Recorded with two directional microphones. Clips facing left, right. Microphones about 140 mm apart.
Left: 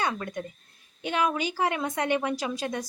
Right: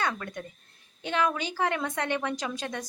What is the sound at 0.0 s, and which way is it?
A woman's voice, 15° left (ahead or behind).